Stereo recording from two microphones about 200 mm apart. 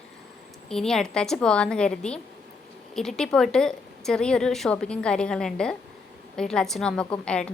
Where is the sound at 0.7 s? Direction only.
Centre (ahead or behind).